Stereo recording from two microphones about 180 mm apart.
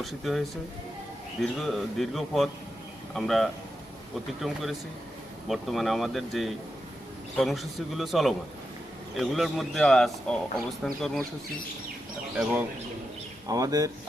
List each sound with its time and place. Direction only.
0.0 s a man's voice: centre (ahead or behind)
12.4 s speech: 10° right (ahead or behind)
13.5 s speech: 20° right (ahead or behind)